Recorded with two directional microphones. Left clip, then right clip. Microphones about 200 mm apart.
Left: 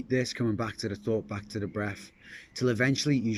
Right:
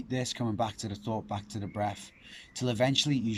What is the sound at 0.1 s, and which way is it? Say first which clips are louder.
Speech: left 5 dB; 20° right (ahead or behind).